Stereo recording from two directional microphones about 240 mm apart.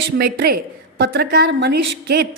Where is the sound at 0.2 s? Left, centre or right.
Right.